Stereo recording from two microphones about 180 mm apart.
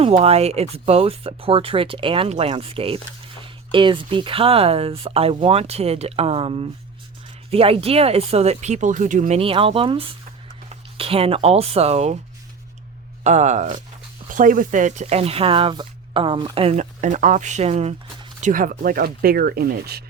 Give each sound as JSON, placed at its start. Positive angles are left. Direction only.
{"t": 0.0, "sound": "speech", "side_deg": -35}
{"t": 9.4, "sound": "speech", "side_deg": -30}
{"t": 13.2, "sound": "speech", "side_deg": -40}